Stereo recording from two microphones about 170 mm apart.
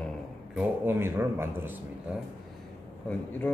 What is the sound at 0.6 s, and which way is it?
Speech, 10° right (ahead or behind).